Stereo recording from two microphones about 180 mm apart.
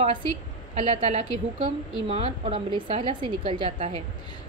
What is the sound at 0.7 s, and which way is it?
A woman's voice, 35° right (ahead or behind).